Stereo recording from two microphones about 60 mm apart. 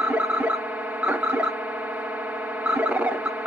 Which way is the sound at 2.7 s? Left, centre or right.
Right.